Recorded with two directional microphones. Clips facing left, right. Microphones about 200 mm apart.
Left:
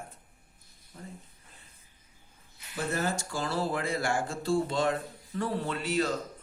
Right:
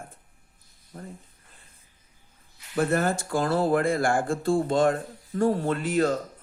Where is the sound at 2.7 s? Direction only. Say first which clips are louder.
Right 7 dB; 55° right (ahead or behind).